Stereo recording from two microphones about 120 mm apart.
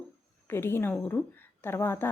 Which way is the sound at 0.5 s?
20° left (ahead or behind).